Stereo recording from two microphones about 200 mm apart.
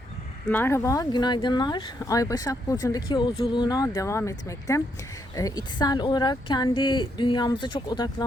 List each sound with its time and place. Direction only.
0.5 s speech: 10° left (ahead or behind)